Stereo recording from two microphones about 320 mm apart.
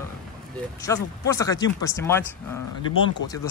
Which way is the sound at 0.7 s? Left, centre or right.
Centre.